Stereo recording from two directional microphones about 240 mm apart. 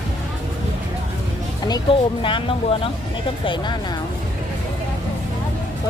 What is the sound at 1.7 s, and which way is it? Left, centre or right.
Speech, left.